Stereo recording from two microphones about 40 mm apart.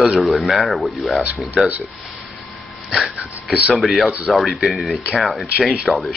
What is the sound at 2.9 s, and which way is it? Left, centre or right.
Speech, centre.